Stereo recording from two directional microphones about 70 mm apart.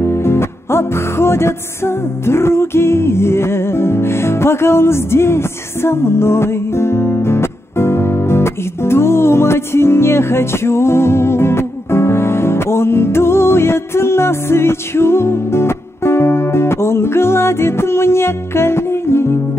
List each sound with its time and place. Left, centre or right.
0.0 s music: left